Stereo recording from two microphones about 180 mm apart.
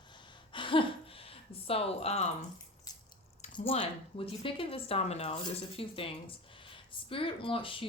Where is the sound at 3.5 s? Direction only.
30° left (ahead or behind).